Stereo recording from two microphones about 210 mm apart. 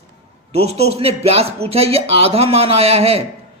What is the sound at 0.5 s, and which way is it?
A man's voice, 30° right (ahead or behind).